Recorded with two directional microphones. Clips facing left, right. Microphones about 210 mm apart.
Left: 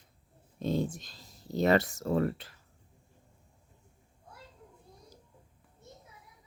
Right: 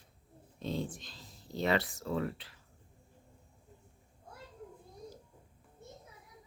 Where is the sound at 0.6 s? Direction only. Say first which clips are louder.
Left 6 dB; 45° left (ahead or behind).